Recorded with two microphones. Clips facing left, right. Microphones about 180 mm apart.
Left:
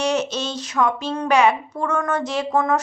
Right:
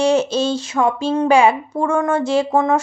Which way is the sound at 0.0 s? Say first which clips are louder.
Right 6 dB; 30° right (ahead or behind).